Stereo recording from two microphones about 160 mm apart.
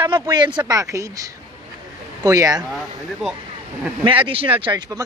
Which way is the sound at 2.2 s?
20° right (ahead or behind).